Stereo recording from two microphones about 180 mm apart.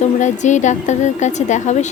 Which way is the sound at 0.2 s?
40° left (ahead or behind).